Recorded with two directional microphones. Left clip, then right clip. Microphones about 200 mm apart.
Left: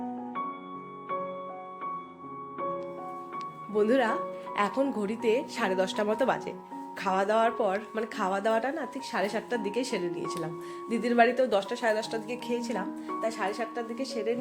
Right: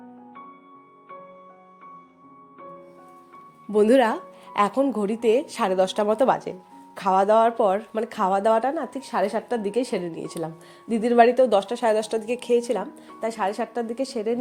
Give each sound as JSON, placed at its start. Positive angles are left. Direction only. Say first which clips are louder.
{"t": 2.6, "sound": "music", "louder": "left 9 dB", "side_deg": 45}
{"t": 3.7, "sound": "a woman's voice", "louder": "right 7 dB", "side_deg": -35}